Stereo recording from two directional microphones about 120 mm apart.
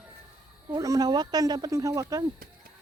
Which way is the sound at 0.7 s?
30° right (ahead or behind).